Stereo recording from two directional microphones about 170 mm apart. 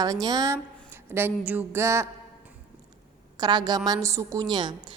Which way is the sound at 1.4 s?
10° right (ahead or behind).